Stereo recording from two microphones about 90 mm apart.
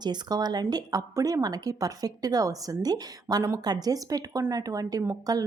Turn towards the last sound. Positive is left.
turn(degrees=-45)  # may be behind; listen again after turning